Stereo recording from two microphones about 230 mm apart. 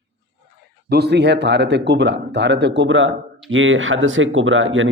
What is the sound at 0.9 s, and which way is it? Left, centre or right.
Speech, right.